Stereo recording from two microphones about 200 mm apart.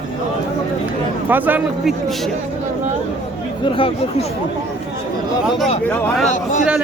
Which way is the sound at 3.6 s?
25° left (ahead or behind).